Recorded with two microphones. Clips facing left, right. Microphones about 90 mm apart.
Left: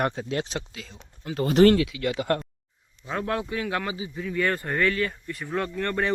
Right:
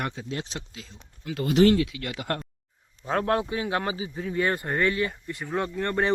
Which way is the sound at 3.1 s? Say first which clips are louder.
Right 4 dB; 45° right (ahead or behind).